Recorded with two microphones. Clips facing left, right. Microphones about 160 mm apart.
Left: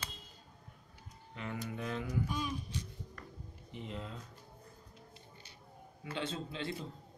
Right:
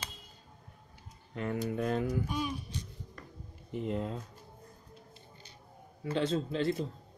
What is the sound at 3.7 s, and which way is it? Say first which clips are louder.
Speech: right 10 dB; 50° right (ahead or behind).